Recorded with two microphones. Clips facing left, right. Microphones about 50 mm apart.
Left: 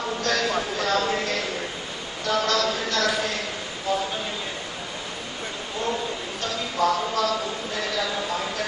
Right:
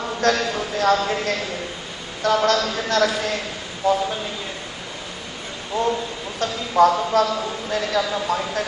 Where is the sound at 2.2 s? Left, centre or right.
Right.